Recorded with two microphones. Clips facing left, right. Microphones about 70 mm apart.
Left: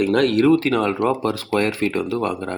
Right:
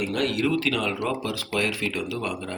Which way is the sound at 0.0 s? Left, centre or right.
Left.